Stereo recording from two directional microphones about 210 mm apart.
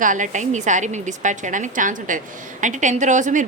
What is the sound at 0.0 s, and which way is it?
A woman's voice, 40° right (ahead or behind).